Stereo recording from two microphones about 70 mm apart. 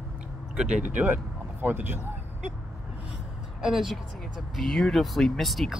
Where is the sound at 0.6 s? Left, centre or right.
Centre.